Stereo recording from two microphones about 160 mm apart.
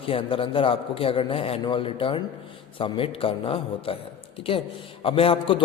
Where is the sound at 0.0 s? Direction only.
35° left (ahead or behind).